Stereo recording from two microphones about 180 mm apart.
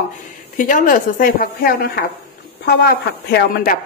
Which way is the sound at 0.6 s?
50° left (ahead or behind).